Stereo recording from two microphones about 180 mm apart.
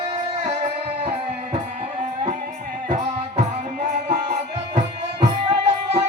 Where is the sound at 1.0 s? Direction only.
35° right (ahead or behind).